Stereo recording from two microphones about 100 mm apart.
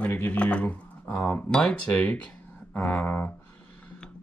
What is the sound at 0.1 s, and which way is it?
Speech, 15° left (ahead or behind).